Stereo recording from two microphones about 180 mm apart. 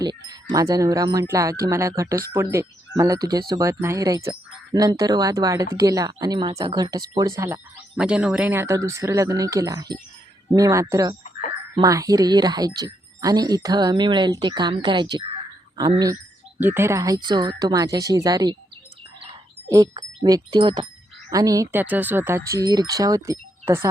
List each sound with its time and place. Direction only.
0.0 s speech: 20° right (ahead or behind)
16.6 s speech: 10° right (ahead or behind)
19.6 s speech: 20° right (ahead or behind)